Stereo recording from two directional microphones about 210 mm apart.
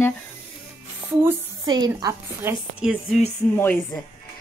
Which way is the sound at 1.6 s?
20° right (ahead or behind).